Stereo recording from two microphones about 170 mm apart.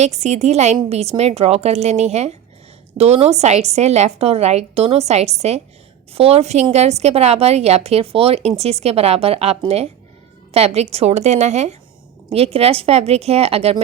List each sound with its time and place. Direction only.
0.0 s a woman's voice: 40° right (ahead or behind)